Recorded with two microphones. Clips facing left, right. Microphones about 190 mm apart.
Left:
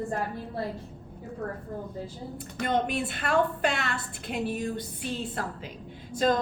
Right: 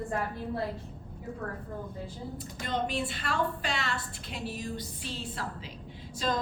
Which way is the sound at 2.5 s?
60° left (ahead or behind).